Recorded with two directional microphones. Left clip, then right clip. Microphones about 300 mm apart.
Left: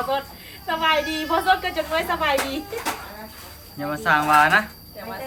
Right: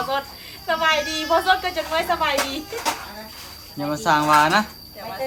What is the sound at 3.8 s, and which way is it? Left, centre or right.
Speech, centre.